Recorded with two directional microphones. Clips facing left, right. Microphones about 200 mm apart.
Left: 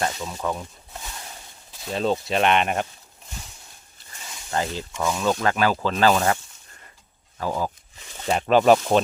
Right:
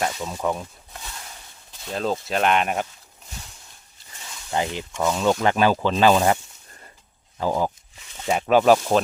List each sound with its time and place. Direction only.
0.3 s speech: 15° right (ahead or behind)
1.9 s speech: centre (ahead or behind)
4.5 s speech: 15° right (ahead or behind)
8.3 s speech: 5° right (ahead or behind)